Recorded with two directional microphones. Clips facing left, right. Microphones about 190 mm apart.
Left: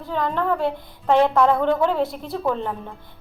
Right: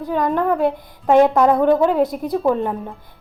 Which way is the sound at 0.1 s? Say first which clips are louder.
Right 4 dB; 15° right (ahead or behind).